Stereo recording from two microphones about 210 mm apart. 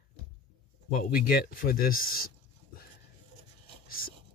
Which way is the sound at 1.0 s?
45° left (ahead or behind).